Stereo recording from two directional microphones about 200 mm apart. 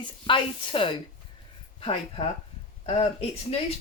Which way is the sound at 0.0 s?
25° left (ahead or behind).